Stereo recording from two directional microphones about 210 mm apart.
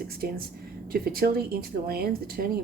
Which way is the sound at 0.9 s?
45° right (ahead or behind).